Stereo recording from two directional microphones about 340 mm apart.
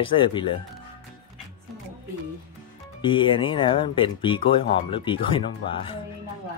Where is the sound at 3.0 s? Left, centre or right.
Centre.